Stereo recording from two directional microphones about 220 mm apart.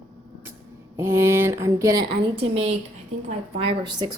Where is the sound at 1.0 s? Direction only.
10° right (ahead or behind).